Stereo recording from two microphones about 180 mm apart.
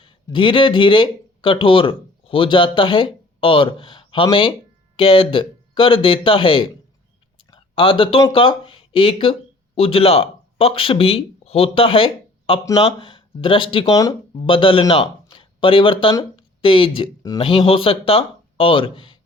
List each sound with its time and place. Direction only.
0.0 s speech: 30° left (ahead or behind)
7.3 s a sound: 30° left (ahead or behind)
8.3 s speech: 30° left (ahead or behind)